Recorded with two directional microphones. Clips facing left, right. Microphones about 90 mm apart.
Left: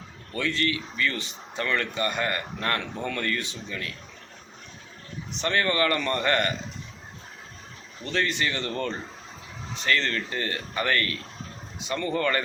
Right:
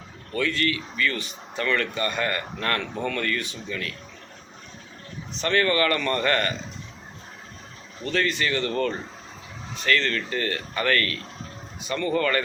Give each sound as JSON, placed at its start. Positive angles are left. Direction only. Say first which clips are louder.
{"t": 0.3, "sound": "speech", "louder": "right 2 dB", "side_deg": 20}
{"t": 5.3, "sound": "speech", "louder": "right 3 dB", "side_deg": 20}
{"t": 8.0, "sound": "speech", "louder": "right 2 dB", "side_deg": 20}